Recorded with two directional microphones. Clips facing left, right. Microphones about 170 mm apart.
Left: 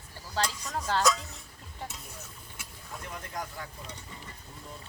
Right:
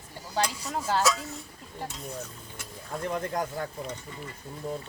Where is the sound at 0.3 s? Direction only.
10° right (ahead or behind).